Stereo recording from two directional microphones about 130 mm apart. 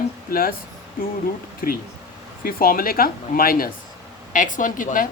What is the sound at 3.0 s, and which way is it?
Speech, 90° left.